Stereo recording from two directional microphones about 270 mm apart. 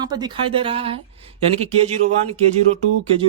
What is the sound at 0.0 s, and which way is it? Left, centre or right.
Speech, centre.